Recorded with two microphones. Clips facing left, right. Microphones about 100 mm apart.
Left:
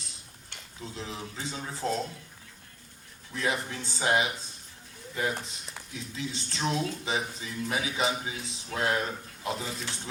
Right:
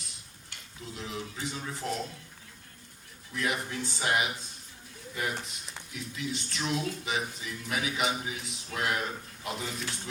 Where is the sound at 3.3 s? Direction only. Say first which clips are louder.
Left 1 dB; 30° left (ahead or behind).